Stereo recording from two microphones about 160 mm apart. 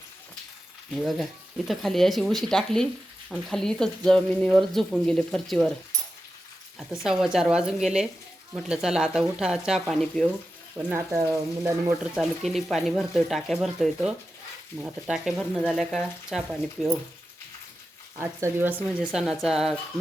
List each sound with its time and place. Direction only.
0.9 s speech: centre (ahead or behind)
7.0 s speech: 5° right (ahead or behind)
10.9 s speech: 20° right (ahead or behind)
12.1 s speech: centre (ahead or behind)
18.2 s speech: 15° right (ahead or behind)